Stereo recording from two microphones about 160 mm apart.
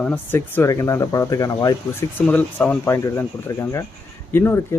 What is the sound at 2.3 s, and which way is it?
Speech, 10° left (ahead or behind).